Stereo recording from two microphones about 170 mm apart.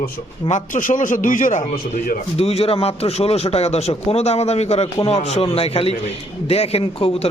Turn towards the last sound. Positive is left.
turn(degrees=35)  # may be behind; listen again after turning